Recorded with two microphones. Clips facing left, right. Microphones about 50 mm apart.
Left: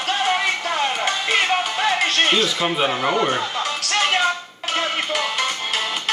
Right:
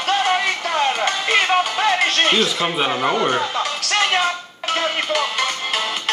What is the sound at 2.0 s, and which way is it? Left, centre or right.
Music, right.